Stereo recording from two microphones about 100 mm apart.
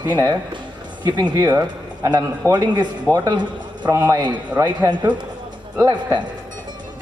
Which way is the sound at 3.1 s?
10° left (ahead or behind).